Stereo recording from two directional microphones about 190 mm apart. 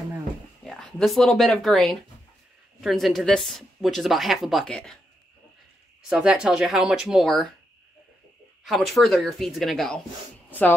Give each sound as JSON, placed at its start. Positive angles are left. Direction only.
{"t": 0.7, "sound": "a woman's voice", "side_deg": 0}
{"t": 6.0, "sound": "a woman's voice", "side_deg": -5}
{"t": 8.6, "sound": "a woman's voice", "side_deg": 0}